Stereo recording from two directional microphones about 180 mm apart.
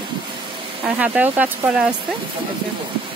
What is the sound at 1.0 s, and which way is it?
Speech, 10° right (ahead or behind).